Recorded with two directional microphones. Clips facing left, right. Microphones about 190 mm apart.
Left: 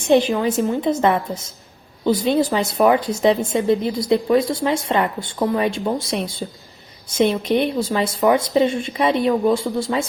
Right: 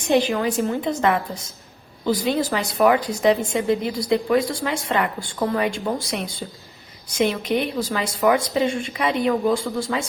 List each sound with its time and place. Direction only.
0.1 s speech: 20° left (ahead or behind)